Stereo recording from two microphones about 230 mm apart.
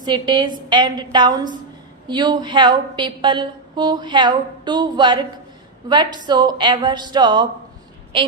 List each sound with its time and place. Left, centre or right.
0.0 s a woman's voice: centre